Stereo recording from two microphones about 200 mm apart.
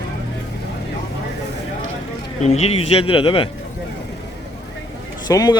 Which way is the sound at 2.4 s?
30° left (ahead or behind).